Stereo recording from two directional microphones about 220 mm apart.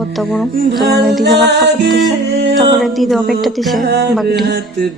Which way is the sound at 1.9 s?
Centre (ahead or behind).